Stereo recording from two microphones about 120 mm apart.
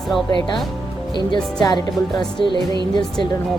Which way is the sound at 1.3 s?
35° left (ahead or behind).